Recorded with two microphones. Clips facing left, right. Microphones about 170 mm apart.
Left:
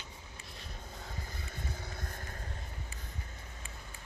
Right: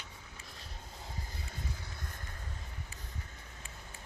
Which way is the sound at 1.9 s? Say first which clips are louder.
Left 4 dB; 50° left (ahead or behind).